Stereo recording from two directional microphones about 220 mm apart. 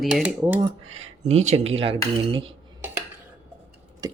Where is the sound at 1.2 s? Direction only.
30° right (ahead or behind).